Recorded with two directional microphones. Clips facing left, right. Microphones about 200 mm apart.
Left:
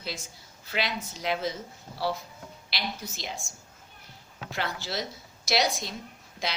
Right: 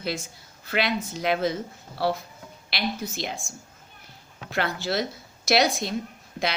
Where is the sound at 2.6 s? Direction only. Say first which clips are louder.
Right 7 dB; 60° right (ahead or behind).